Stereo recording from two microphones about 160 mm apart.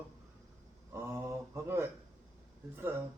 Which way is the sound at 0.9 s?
15° right (ahead or behind).